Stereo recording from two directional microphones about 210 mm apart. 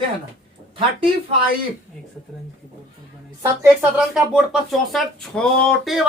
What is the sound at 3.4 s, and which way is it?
Speech, 15° right (ahead or behind).